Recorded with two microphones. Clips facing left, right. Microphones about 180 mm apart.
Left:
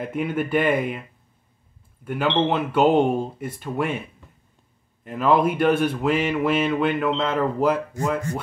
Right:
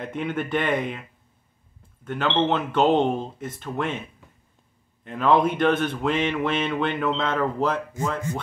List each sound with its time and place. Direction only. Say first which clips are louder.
0.0 s speech: left 3 dB; 5° left (ahead or behind)
2.0 s speech: left 1 dB; 10° left (ahead or behind)
5.0 s speech: left 1 dB; 5° left (ahead or behind)